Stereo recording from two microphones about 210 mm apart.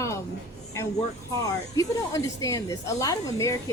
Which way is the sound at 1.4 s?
15° left (ahead or behind).